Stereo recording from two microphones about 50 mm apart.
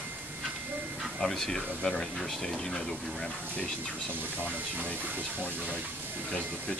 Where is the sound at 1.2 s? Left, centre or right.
Centre.